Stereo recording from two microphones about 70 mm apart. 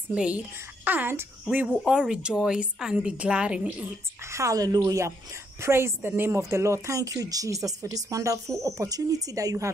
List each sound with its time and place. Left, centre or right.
0.1 s a woman's voice: centre
0.8 s a child's voice: right
1.9 s a woman's voice: centre
4.2 s a woman's voice: right